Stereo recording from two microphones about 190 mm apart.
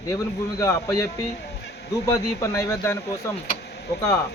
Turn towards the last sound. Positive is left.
turn(degrees=60)  # may be behind; listen again after turning